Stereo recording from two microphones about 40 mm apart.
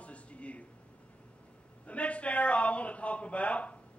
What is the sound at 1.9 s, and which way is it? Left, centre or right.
A man's voice, left.